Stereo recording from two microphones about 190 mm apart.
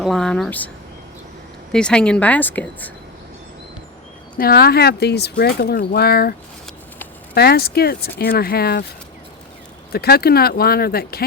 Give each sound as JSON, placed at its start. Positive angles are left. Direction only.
{"t": 0.0, "sound": "speech", "side_deg": 0}
{"t": 1.7, "sound": "speech", "side_deg": 5}
{"t": 4.4, "sound": "speech", "side_deg": 50}
{"t": 7.3, "sound": "speech", "side_deg": 55}
{"t": 9.9, "sound": "speech", "side_deg": 55}